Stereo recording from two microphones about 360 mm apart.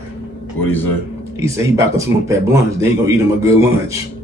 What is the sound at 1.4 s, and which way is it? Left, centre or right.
A man's voice, centre.